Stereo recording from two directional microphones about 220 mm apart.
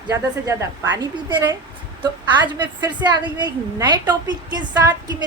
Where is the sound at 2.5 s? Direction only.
20° right (ahead or behind).